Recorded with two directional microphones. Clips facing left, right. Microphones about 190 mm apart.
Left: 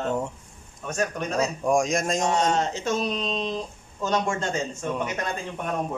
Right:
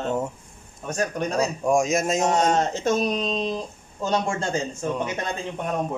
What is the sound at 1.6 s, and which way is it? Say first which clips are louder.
Speech: right 2 dB; 5° right (ahead or behind).